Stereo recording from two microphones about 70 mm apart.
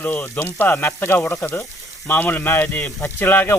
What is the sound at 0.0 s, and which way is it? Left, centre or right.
Speech, left.